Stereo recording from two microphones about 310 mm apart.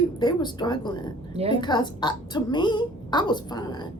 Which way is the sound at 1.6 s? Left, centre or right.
Centre.